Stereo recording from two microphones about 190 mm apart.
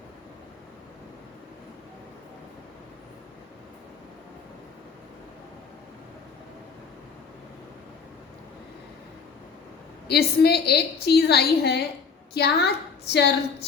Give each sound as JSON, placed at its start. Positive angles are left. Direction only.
{"t": 10.1, "sound": "a woman's voice", "side_deg": 55}